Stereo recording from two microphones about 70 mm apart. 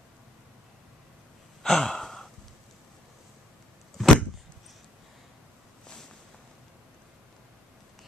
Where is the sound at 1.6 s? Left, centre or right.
Centre.